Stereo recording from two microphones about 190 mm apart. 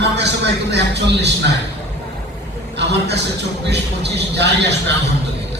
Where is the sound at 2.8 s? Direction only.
65° right (ahead or behind).